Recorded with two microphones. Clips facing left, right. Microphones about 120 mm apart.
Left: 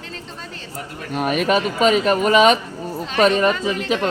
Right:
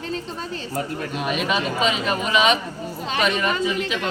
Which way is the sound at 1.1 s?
45° left (ahead or behind).